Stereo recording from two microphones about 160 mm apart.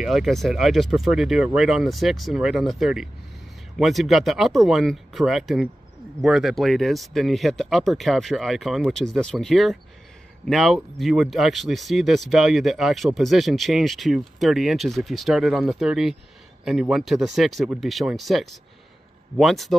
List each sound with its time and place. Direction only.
0.0 s speech: centre (ahead or behind)